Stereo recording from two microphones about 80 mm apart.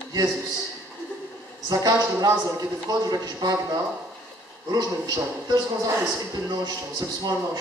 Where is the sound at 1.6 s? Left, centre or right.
Right.